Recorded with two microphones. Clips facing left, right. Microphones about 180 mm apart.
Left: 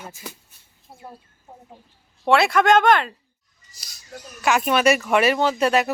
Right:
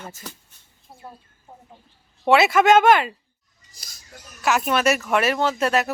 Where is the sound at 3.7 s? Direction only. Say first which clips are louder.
Right 1 dB; 50° right (ahead or behind).